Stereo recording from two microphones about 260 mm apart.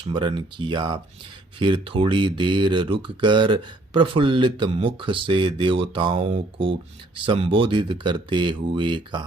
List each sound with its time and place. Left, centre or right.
0.0 s speech: centre